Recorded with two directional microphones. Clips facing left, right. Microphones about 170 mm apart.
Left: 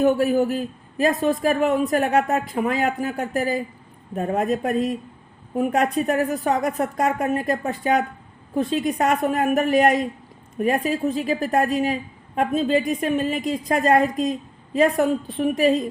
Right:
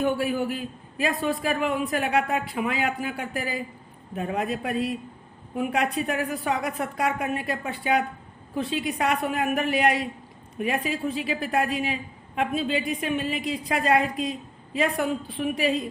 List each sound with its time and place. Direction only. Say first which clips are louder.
0.0 s a man's voice: left 6 dB; 40° left (ahead or behind)